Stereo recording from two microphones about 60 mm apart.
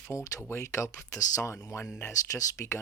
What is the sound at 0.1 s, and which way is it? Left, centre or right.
Speech, left.